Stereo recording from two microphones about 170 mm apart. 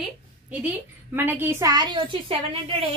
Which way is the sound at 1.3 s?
15° right (ahead or behind).